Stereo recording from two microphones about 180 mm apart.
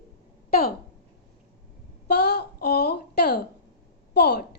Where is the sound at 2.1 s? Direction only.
65° left (ahead or behind).